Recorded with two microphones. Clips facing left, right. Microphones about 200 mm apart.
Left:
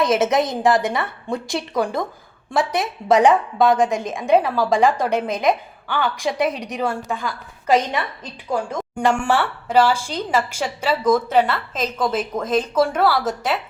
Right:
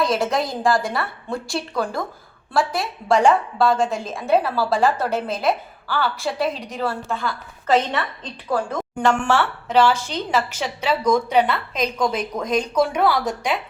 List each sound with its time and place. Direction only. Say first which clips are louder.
0.2 s a woman's voice: left 3 dB; 20° left (ahead or behind)
6.5 s a woman's voice: left 2 dB; centre (ahead or behind)
6.7 s a woman's voice: left 1 dB; 15° left (ahead or behind)